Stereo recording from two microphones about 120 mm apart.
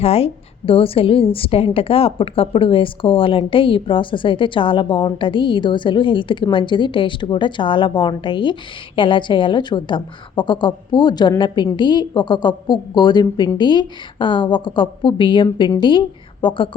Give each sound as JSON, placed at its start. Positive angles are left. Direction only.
{"t": 0.0, "sound": "a woman's voice", "side_deg": 55}